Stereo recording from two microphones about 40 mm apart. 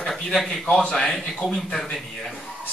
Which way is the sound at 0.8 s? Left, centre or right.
Centre.